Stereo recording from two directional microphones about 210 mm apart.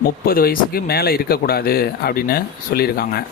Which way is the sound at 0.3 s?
45° left (ahead or behind).